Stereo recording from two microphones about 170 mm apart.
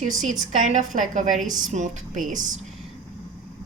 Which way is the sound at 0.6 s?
45° right (ahead or behind).